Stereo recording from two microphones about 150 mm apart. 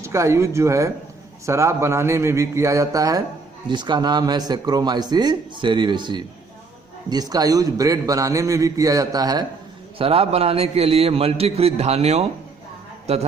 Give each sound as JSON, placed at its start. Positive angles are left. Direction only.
{"t": 0.0, "sound": "a man's voice", "side_deg": -20}
{"t": 10.0, "sound": "a man's voice", "side_deg": -40}